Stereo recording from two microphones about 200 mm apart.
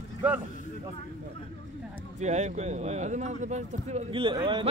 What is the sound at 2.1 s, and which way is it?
Speech, 35° right (ahead or behind).